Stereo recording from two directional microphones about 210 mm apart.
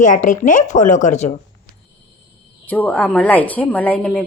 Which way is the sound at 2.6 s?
5° left (ahead or behind).